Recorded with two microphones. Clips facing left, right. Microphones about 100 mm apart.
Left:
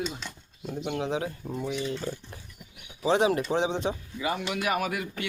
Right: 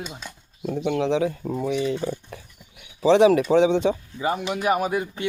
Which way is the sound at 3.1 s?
90° right.